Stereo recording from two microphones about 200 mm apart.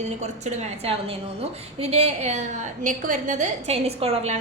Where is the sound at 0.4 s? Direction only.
35° right (ahead or behind).